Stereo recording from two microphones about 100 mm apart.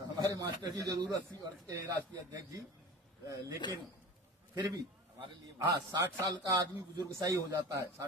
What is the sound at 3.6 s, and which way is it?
Speech, 45° left (ahead or behind).